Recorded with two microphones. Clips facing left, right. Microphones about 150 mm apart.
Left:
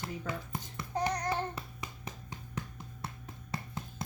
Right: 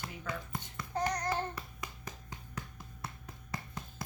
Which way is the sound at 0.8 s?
15° left (ahead or behind).